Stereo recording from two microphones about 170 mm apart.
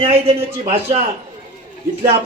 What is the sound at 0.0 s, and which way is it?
Speech, 35° right (ahead or behind).